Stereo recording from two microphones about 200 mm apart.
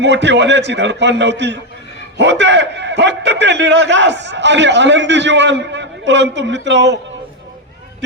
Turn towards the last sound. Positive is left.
turn(degrees=-60)  # may be behind; listen again after turning